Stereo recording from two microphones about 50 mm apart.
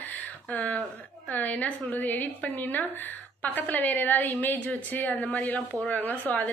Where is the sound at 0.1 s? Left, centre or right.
Left.